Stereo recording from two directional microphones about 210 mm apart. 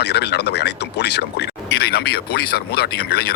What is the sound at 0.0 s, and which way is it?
Speech, 50° left (ahead or behind).